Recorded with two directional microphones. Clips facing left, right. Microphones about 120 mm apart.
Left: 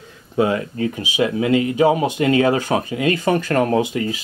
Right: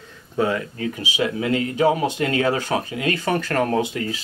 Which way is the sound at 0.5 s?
30° left (ahead or behind).